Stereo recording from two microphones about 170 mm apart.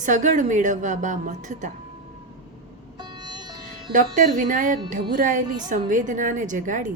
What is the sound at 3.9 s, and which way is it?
A woman's voice, 50° right (ahead or behind).